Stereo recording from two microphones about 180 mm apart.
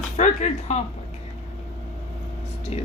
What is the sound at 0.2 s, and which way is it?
Speech, 40° left (ahead or behind).